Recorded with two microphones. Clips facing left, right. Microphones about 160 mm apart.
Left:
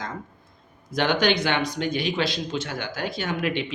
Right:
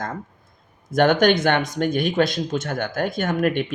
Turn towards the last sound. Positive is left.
turn(degrees=-50)  # may be behind; listen again after turning